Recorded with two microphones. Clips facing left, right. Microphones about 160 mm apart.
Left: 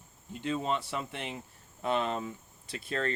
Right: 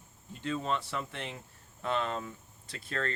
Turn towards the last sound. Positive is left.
turn(degrees=15)  # may be behind; listen again after turning